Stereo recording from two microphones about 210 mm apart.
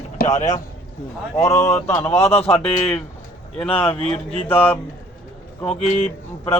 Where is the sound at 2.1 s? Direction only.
30° left (ahead or behind).